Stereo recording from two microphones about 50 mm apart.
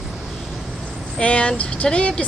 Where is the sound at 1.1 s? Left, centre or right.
Left.